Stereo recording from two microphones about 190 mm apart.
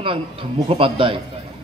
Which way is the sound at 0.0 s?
25° right (ahead or behind).